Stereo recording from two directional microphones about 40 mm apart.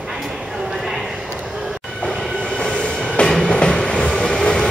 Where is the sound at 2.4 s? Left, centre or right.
Centre.